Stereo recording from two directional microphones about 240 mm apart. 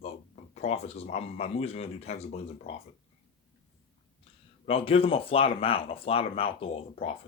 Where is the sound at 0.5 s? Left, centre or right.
Left.